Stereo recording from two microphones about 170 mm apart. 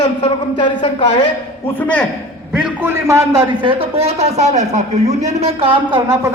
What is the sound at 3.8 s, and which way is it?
A man's voice, 35° right (ahead or behind).